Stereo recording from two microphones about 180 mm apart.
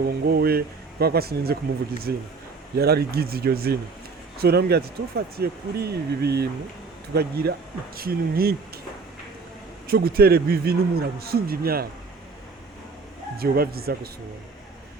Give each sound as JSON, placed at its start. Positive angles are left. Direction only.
{"t": 0.0, "sound": "speech", "side_deg": -60}
{"t": 9.8, "sound": "speech", "side_deg": -55}
{"t": 13.3, "sound": "speech", "side_deg": -55}